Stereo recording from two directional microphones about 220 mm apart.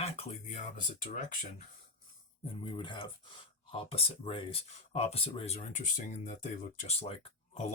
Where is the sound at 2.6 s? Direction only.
20° left (ahead or behind).